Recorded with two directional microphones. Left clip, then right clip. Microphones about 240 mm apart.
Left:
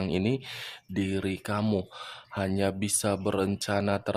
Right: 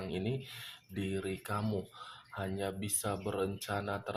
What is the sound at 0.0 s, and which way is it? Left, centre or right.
Speech, left.